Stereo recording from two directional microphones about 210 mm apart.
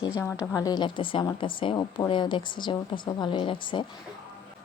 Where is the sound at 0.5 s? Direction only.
15° left (ahead or behind).